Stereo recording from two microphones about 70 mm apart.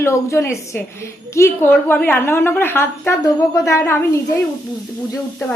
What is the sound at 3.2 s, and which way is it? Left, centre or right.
A woman's voice, left.